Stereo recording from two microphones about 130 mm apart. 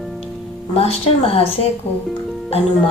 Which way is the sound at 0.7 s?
50° left (ahead or behind).